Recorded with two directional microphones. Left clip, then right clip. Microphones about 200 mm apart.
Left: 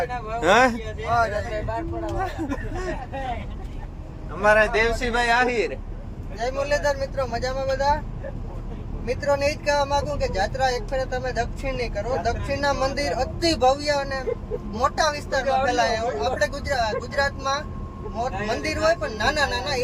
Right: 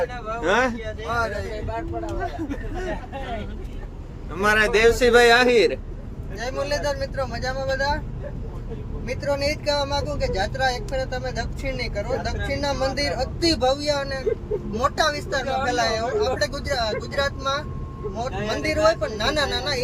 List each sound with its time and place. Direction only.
0.4 s speech: 25° left (ahead or behind)
1.1 s speech: centre (ahead or behind)
4.4 s a man's voice: 35° right (ahead or behind)
6.4 s speech: centre (ahead or behind)
9.0 s speech: centre (ahead or behind)